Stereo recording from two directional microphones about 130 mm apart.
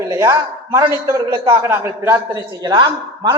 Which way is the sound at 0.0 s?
20° right (ahead or behind).